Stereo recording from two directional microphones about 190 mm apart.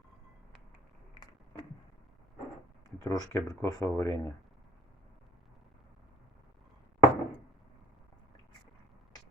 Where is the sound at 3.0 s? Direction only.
20° left (ahead or behind).